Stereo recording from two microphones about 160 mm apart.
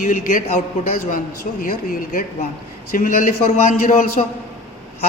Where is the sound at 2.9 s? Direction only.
60° left (ahead or behind).